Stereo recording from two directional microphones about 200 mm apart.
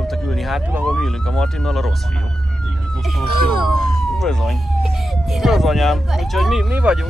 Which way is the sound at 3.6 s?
Centre (ahead or behind).